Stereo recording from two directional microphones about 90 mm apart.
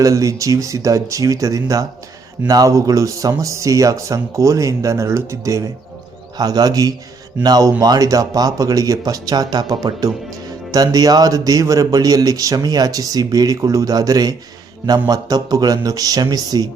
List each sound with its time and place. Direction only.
0.0 s speech: 35° right (ahead or behind)
6.3 s speech: 45° right (ahead or behind)